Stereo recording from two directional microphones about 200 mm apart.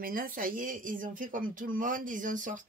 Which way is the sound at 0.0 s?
45° right (ahead or behind).